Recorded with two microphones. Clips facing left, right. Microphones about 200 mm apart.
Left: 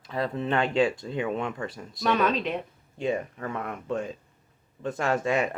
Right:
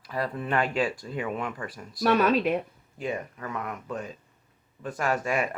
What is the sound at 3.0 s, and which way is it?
Speech, 25° left (ahead or behind).